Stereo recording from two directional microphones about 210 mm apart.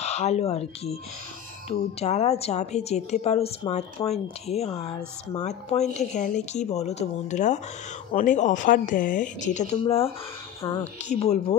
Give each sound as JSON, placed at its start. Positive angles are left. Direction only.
{"t": 0.0, "sound": "a woman's voice", "side_deg": 30}